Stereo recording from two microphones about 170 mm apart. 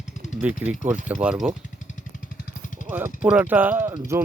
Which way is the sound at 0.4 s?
10° right (ahead or behind).